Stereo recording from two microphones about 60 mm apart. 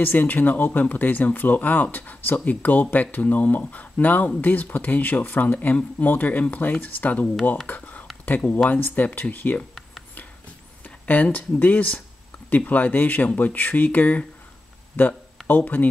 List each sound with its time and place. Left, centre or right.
0.0 s speech: left
11.1 s speech: left
15.0 s speech: left